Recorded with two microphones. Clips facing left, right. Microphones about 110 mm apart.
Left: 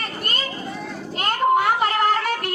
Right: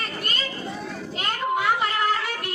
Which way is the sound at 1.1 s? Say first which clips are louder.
Left 7 dB; 50° left (ahead or behind).